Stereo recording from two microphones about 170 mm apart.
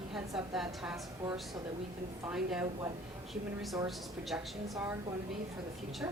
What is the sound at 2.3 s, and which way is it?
Speech, 5° right (ahead or behind).